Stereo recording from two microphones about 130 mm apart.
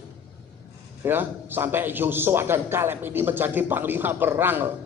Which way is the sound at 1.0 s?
15° right (ahead or behind).